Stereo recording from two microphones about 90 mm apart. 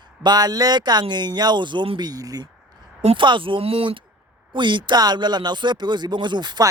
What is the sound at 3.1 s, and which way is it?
Speech, 70° right (ahead or behind).